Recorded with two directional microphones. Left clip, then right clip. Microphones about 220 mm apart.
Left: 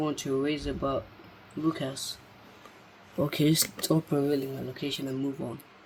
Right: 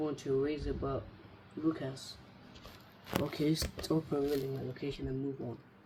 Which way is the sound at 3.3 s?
35° left (ahead or behind).